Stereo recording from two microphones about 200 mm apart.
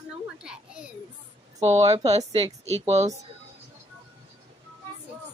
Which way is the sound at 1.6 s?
30° right (ahead or behind).